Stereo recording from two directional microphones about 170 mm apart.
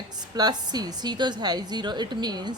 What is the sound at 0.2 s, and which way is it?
A woman's voice, 25° right (ahead or behind).